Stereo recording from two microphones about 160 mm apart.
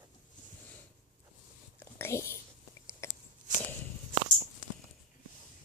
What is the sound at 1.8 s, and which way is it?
Whispering, 15° left (ahead or behind).